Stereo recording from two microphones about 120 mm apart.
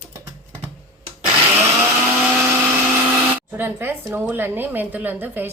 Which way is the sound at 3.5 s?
20° right (ahead or behind).